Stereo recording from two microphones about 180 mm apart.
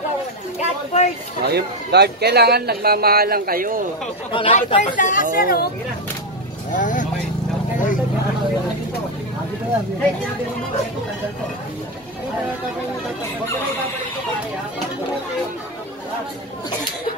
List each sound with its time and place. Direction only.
0.6 s a sound: 40° left (ahead or behind)
1.4 s speech: 65° right (ahead or behind)
4.3 s speech: 30° left (ahead or behind)
4.6 s speech: 40° left (ahead or behind)
6.7 s speech: 45° left (ahead or behind)